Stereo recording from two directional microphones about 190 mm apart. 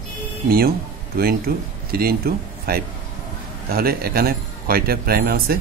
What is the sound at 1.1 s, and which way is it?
Speech, 55° right (ahead or behind).